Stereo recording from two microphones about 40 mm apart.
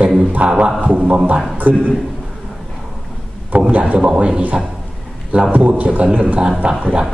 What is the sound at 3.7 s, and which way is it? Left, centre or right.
Speech, right.